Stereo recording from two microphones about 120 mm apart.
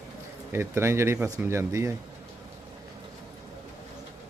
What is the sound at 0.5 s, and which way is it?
Speech, 20° right (ahead or behind).